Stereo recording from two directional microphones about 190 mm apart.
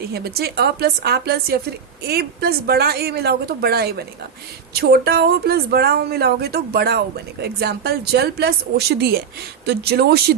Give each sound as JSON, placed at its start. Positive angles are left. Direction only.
{"t": 0.1, "sound": "speech", "side_deg": -55}